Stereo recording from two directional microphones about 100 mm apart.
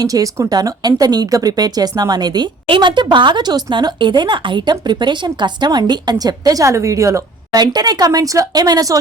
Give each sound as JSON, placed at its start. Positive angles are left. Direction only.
{"t": 0.0, "sound": "speech", "side_deg": -35}